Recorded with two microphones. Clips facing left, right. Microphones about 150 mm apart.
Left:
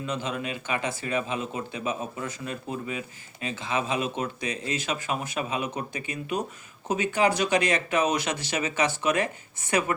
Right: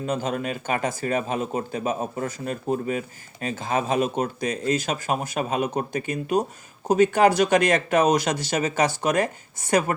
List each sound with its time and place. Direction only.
0.0 s speech: 45° right (ahead or behind)